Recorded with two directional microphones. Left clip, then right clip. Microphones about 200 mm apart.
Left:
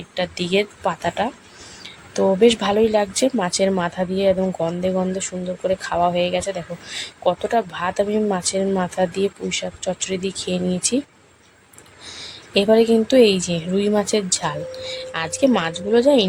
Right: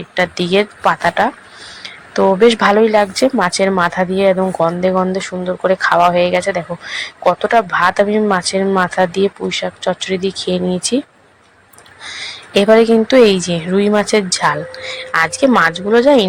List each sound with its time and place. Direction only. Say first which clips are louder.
0.1 s speech: right 7 dB; centre (ahead or behind)
2.1 s speech: right 6 dB; 20° right (ahead or behind)
2.4 s speech: right 6 dB; centre (ahead or behind)
12.1 s speech: right 5 dB; centre (ahead or behind)